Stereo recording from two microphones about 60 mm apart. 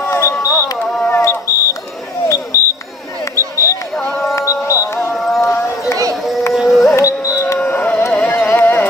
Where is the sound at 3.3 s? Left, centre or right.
Left.